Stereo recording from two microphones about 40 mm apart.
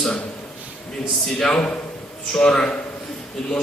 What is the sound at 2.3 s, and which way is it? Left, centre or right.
Speech, centre.